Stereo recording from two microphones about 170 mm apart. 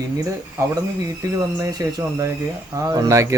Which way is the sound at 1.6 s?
20° right (ahead or behind).